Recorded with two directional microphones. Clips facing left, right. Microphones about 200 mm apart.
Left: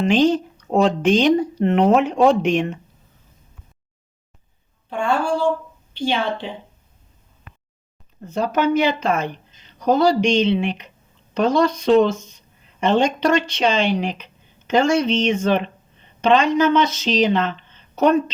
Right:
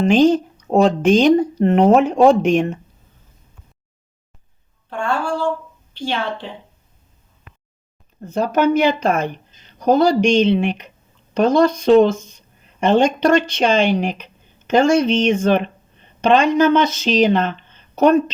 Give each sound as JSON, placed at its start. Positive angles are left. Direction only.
{"t": 0.0, "sound": "speech", "side_deg": -45}
{"t": 4.9, "sound": "a woman's voice", "side_deg": 0}
{"t": 8.3, "sound": "speech", "side_deg": -50}